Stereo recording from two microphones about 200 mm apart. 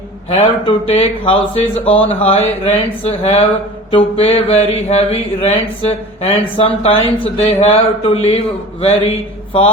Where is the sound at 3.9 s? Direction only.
30° left (ahead or behind).